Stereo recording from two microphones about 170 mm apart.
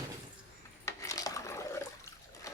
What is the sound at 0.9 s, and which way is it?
Cutlery, 20° left (ahead or behind).